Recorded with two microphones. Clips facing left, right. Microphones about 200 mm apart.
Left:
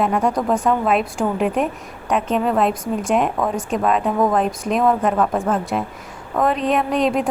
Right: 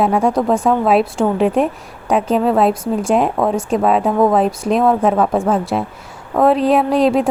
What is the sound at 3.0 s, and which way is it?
Speech, 30° right (ahead or behind).